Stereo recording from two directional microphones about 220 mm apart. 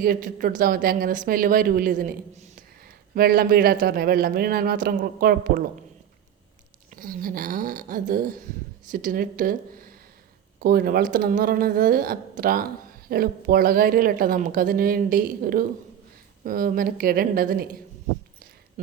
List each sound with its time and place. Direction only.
0.0 s speech: 40° right (ahead or behind)
6.9 s speech: 40° right (ahead or behind)